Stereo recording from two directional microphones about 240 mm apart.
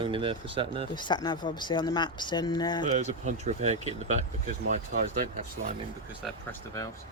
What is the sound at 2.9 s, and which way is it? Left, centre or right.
Speech, right.